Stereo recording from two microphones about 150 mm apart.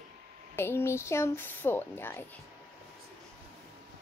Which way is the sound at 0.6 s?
15° left (ahead or behind).